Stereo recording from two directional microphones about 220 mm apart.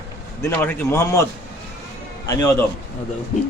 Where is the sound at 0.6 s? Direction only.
10° left (ahead or behind).